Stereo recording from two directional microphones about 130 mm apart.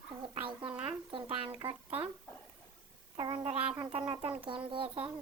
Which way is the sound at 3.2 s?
35° right (ahead or behind).